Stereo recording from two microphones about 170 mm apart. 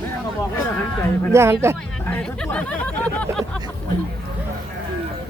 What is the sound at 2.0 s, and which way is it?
Speech, 10° left (ahead or behind).